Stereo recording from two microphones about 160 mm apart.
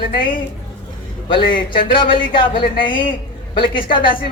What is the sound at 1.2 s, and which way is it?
A woman's voice, 30° left (ahead or behind).